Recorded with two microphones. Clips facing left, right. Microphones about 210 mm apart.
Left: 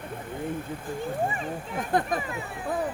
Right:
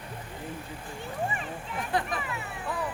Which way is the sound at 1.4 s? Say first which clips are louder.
Left 4 dB; 45° left (ahead or behind).